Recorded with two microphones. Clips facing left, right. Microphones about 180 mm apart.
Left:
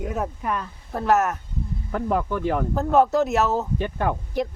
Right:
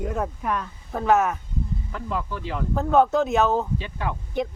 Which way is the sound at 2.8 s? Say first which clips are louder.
Right 1 dB; 5° left (ahead or behind).